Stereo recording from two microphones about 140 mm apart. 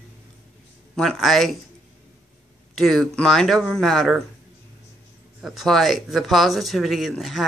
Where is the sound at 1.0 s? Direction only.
Centre (ahead or behind).